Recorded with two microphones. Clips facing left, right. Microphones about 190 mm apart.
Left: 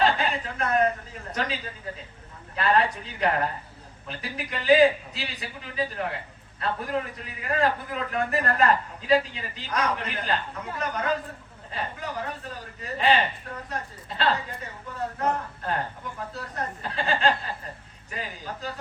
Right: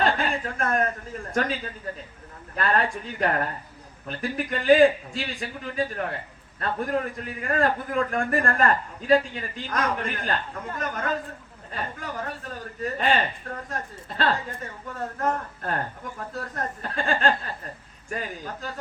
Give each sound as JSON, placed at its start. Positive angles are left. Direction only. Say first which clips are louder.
{"t": 0.0, "sound": "chuckle", "louder": "even", "side_deg": -45}
{"t": 2.6, "sound": "a man's voice", "louder": "left 1 dB", "side_deg": -45}